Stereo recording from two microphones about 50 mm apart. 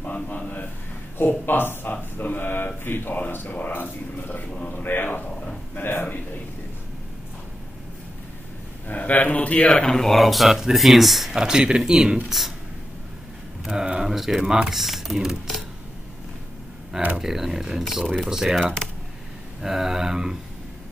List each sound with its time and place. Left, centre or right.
0.0 s speech: left
4.6 s a sound: left
8.8 s a man's voice: left
9.8 s speech: centre
11.4 s speech: centre
12.3 s speech: centre
13.7 s speech: centre
17.2 s speech: centre